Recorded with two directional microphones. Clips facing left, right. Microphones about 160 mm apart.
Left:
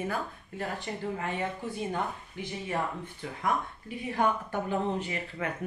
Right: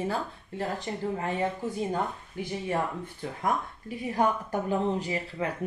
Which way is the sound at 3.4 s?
40° right (ahead or behind).